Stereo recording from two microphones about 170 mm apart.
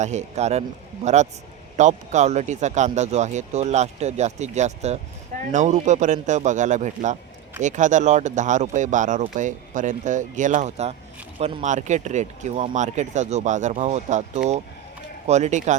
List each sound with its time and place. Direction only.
0.0 s speech: 45° right (ahead or behind)